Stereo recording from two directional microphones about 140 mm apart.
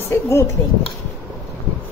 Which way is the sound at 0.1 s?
20° left (ahead or behind).